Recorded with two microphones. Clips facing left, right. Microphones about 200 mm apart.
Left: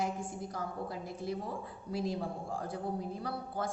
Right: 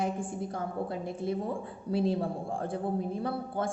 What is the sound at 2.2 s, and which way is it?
Speech, 60° right (ahead or behind).